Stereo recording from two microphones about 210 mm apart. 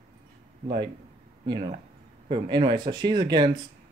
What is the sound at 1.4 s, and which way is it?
Speech, 25° right (ahead or behind).